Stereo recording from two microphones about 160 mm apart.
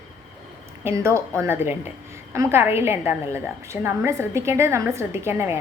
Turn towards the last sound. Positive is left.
turn(degrees=-15)  # may be behind; listen again after turning